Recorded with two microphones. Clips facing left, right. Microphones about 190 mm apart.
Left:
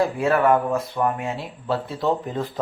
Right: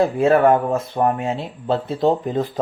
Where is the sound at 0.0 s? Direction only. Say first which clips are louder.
Right 5 dB; 25° right (ahead or behind).